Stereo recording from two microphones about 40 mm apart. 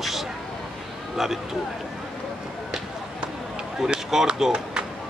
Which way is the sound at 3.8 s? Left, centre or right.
Centre.